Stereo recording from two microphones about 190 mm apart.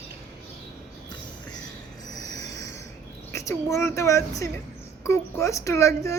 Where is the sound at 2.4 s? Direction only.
20° left (ahead or behind).